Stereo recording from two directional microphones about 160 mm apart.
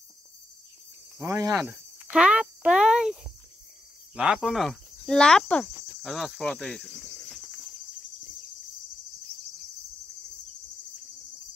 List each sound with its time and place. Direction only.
1.2 s cricket: 20° right (ahead or behind)
1.7 s speech: 5° right (ahead or behind)
4.1 s insect: 5° right (ahead or behind)